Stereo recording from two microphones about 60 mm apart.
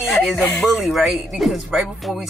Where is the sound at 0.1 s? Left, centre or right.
Centre.